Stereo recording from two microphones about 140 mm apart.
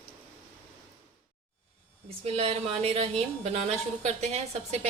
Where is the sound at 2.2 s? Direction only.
45° right (ahead or behind).